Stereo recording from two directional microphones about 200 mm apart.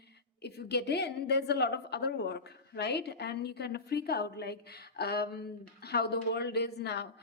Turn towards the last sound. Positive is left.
turn(degrees=55)  # may be behind; listen again after turning